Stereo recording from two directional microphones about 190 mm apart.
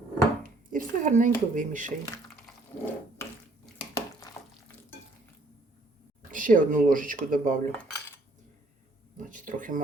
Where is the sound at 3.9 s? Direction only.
20° left (ahead or behind).